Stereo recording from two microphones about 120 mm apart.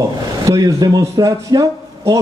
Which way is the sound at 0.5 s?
30° right (ahead or behind).